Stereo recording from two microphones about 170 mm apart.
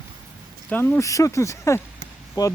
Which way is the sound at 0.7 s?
10° left (ahead or behind).